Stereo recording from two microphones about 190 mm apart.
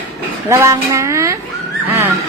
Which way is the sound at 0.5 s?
15° right (ahead or behind).